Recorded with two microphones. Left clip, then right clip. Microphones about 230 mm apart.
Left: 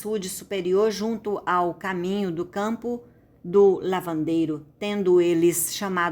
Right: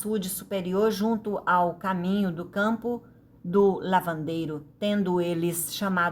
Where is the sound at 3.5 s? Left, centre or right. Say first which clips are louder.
Left 5 dB; left.